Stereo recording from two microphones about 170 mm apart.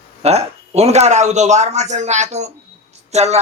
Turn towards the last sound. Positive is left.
turn(degrees=-40)  # may be behind; listen again after turning